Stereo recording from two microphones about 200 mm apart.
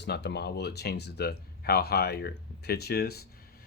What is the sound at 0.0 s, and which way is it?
Speech, 60° left (ahead or behind).